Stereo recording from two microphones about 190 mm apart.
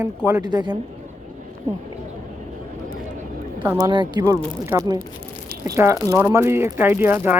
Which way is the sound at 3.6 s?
10° right (ahead or behind).